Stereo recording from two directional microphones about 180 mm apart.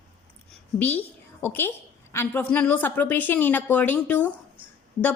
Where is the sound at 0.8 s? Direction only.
10° left (ahead or behind).